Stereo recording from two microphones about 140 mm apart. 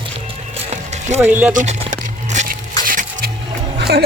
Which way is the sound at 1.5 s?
60° right (ahead or behind).